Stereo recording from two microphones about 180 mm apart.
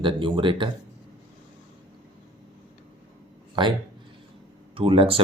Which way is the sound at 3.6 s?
25° right (ahead or behind).